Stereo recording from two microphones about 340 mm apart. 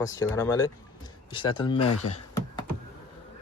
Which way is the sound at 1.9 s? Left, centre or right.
Left.